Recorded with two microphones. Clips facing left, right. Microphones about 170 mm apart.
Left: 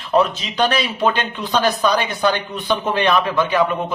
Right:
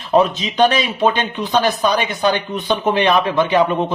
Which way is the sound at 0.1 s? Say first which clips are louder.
Right 2 dB; 20° right (ahead or behind).